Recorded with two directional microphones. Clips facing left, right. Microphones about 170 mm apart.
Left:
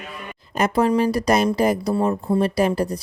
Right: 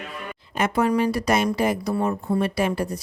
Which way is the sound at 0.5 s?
35° left (ahead or behind).